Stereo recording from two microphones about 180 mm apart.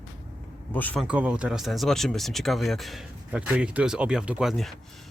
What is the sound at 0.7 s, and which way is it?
Speech, 10° left (ahead or behind).